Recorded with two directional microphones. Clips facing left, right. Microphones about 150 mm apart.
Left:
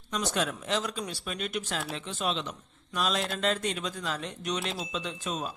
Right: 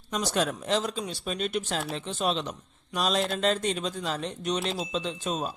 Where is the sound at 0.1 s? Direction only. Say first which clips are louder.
Right 3 dB; 35° right (ahead or behind).